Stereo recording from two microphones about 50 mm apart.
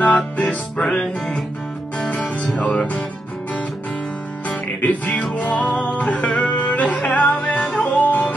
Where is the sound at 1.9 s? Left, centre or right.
Left.